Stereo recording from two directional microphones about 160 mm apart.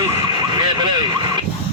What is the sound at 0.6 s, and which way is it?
Vehicle, 25° right (ahead or behind).